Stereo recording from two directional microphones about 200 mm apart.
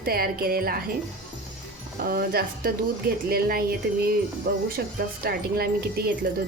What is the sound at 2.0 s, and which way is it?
A woman's voice, 50° right (ahead or behind).